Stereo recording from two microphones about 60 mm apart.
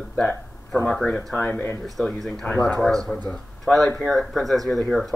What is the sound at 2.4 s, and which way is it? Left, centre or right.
Speech, left.